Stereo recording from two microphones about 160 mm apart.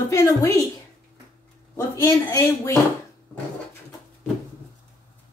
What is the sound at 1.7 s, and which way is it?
A woman's voice, 15° left (ahead or behind).